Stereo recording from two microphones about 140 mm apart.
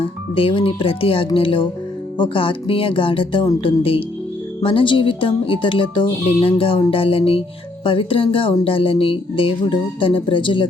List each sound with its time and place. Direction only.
0.3 s speech: 40° left (ahead or behind)